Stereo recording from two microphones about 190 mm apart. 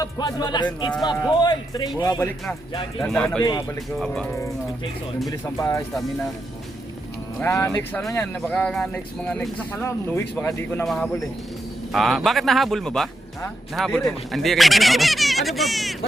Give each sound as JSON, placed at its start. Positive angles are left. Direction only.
{"t": 0.0, "sound": "speech", "side_deg": 20}
{"t": 5.5, "sound": "speech", "side_deg": 15}
{"t": 7.5, "sound": "speech", "side_deg": 15}